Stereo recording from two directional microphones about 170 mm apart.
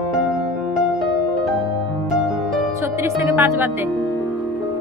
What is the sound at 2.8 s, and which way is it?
Speech, 15° right (ahead or behind).